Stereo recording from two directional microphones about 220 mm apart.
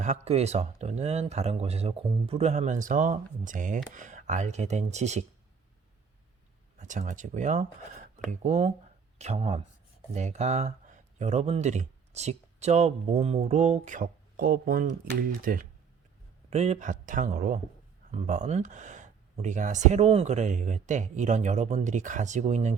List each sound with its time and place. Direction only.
0.0 s speech: 30° right (ahead or behind)
6.7 s speech: 35° right (ahead or behind)
16.5 s speech: 30° right (ahead or behind)